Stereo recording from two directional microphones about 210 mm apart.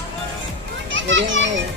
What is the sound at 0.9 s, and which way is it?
Children playing, 60° right (ahead or behind).